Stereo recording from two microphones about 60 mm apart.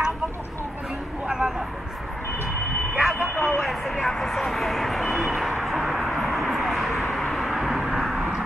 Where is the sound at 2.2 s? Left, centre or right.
Left.